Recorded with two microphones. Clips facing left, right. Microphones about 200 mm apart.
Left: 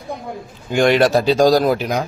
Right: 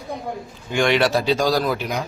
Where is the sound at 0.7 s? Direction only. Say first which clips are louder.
Left 5 dB; 40° left (ahead or behind).